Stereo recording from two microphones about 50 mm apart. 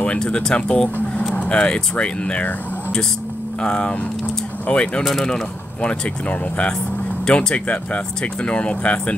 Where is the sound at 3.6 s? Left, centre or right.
Left.